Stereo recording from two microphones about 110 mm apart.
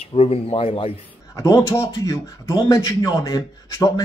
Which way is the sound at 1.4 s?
30° left (ahead or behind).